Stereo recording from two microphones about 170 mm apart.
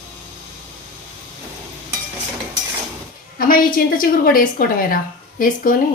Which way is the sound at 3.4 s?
55° left (ahead or behind).